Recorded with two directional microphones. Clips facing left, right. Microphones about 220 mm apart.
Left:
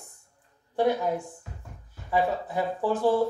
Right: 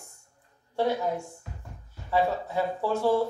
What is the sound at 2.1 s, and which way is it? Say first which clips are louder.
Music: even; 15° left (ahead or behind).